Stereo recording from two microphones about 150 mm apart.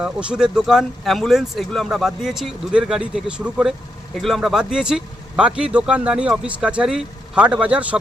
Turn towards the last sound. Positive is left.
turn(degrees=-10)  # may be behind; listen again after turning